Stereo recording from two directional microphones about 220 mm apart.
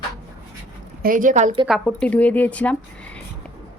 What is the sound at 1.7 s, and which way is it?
A woman's voice, 5° left (ahead or behind).